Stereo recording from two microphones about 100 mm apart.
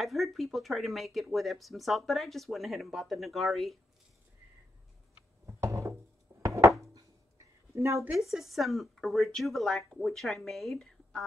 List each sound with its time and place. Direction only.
0.0 s speech: centre (ahead or behind)
5.6 s wood: 30° right (ahead or behind)
6.4 s a sound: 30° right (ahead or behind)
7.7 s speech: 25° right (ahead or behind)
8.1 s speech: 5° right (ahead or behind)